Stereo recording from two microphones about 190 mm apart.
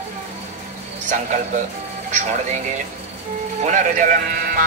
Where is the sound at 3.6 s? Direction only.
40° right (ahead or behind).